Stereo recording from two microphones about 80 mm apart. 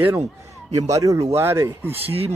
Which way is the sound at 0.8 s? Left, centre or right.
Right.